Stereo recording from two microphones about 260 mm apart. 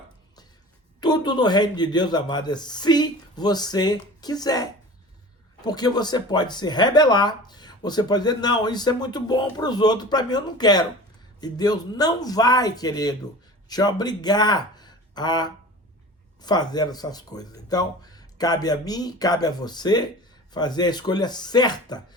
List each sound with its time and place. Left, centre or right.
1.0 s speech: centre